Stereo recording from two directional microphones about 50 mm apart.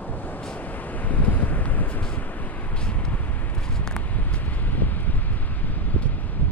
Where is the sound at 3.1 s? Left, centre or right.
Left.